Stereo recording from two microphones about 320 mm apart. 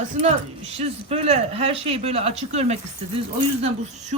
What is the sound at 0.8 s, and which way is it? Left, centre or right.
Speech, centre.